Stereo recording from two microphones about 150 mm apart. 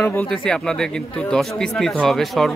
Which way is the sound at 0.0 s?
10° left (ahead or behind).